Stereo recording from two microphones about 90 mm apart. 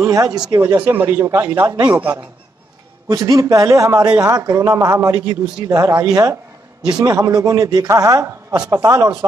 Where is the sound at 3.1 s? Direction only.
40° right (ahead or behind).